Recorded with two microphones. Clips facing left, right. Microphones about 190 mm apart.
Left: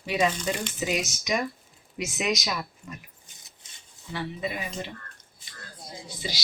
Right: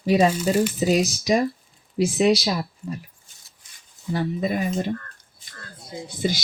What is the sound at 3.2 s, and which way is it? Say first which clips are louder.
Rub: left 2 dB; 20° left (ahead or behind).